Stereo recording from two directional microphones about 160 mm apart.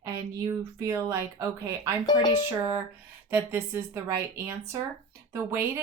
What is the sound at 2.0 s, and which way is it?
Speech, 25° left (ahead or behind).